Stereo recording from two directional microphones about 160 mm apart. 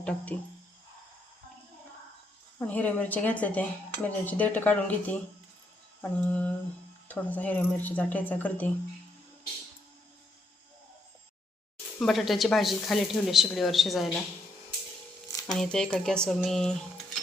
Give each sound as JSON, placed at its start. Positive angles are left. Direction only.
{"t": 0.0, "sound": "a woman's voice", "side_deg": 10}
{"t": 2.6, "sound": "a woman's voice", "side_deg": 10}
{"t": 11.9, "sound": "speech", "side_deg": 0}
{"t": 15.4, "sound": "speech", "side_deg": 5}